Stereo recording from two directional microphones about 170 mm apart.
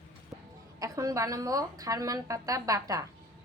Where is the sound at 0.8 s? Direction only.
20° right (ahead or behind).